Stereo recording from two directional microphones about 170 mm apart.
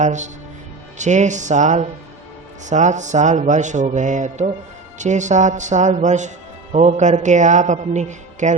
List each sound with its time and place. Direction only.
0.0 s mantra: 45° right (ahead or behind)